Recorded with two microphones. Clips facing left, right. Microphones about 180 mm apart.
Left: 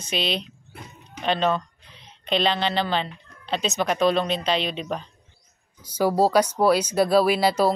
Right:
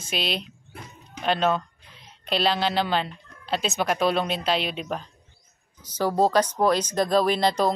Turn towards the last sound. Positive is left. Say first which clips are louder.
# left 2 dB
turn(degrees=5)  # may be behind; listen again after turning